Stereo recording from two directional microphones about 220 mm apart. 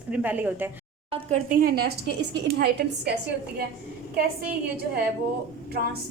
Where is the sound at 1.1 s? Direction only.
35° right (ahead or behind).